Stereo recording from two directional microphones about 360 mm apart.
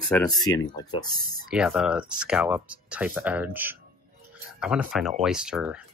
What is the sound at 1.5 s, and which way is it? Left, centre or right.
Speech, centre.